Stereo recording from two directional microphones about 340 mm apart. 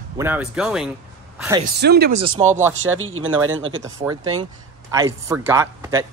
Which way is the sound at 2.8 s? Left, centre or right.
Right.